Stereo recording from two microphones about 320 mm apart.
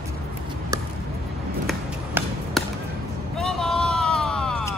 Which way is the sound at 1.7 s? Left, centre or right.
Centre.